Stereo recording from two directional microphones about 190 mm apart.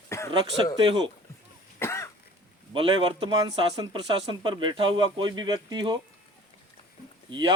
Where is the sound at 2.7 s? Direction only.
25° right (ahead or behind).